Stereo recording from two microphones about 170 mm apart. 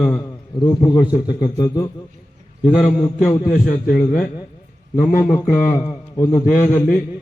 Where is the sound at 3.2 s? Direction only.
45° left (ahead or behind).